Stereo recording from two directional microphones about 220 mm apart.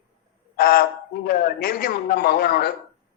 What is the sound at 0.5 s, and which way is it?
A man's voice, 40° left (ahead or behind).